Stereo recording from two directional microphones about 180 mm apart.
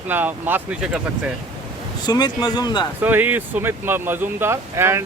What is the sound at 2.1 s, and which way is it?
Speech, 20° left (ahead or behind).